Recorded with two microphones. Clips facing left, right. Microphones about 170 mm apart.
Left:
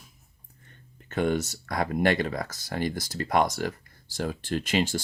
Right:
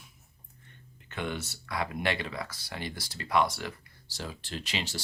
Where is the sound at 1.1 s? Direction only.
40° left (ahead or behind).